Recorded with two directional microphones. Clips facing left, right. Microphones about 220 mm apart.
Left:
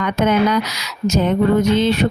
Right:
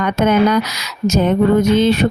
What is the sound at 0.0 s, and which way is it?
Speech, 45° right (ahead or behind).